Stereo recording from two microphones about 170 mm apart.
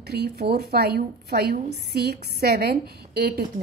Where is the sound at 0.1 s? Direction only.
70° right (ahead or behind).